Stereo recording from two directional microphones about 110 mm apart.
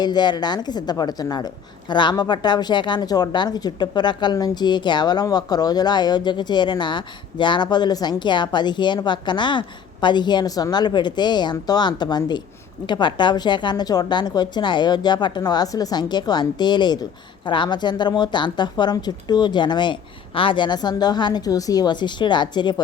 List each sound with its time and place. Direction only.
0.0 s a woman's voice: 40° left (ahead or behind)